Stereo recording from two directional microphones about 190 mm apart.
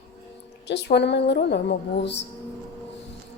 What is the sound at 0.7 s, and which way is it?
Speech, 65° left (ahead or behind).